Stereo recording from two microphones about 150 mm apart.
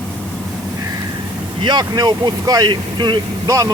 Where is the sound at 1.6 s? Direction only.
30° right (ahead or behind).